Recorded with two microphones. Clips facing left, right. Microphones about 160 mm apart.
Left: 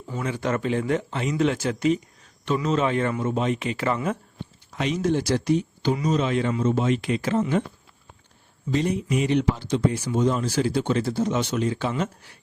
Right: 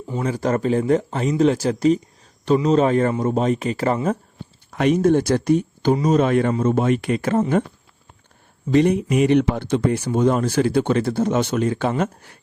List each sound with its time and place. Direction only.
0.2 s speech: 40° right (ahead or behind)
4.7 s speech: 55° right (ahead or behind)
8.7 s speech: 65° right (ahead or behind)